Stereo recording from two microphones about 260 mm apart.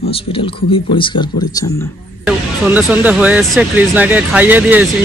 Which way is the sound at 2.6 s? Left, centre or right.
Centre.